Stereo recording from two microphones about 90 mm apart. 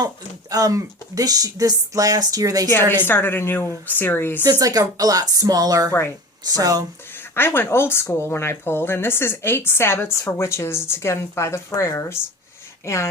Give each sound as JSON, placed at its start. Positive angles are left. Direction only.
{"t": 0.5, "sound": "speech", "side_deg": -40}
{"t": 3.1, "sound": "speech", "side_deg": 25}
{"t": 4.4, "sound": "speech", "side_deg": -45}
{"t": 7.3, "sound": "speech", "side_deg": 25}